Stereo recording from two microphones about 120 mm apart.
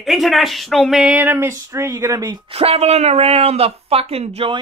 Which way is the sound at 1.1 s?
15° right (ahead or behind).